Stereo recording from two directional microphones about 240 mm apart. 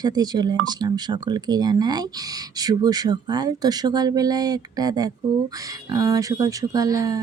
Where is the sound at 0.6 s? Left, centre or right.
Centre.